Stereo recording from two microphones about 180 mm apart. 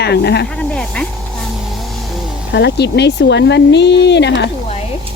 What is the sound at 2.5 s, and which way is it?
Speech, 70° left (ahead or behind).